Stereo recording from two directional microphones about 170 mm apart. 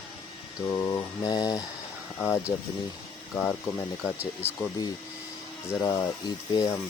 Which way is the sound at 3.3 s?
Centre (ahead or behind).